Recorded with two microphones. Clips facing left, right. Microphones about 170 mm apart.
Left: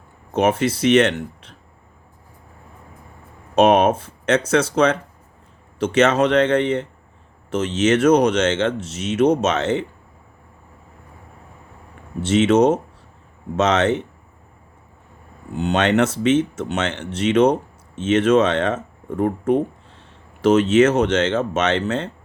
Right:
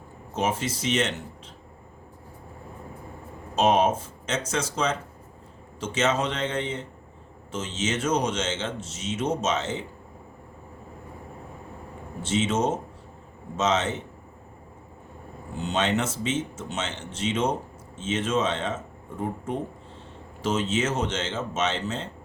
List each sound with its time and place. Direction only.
0.3 s speech: 65° left (ahead or behind)
3.5 s speech: 65° left (ahead or behind)
12.2 s speech: 70° left (ahead or behind)
15.5 s speech: 65° left (ahead or behind)